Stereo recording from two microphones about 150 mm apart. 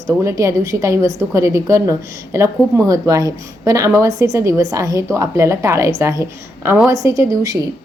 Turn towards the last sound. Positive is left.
turn(degrees=-20)  # may be behind; listen again after turning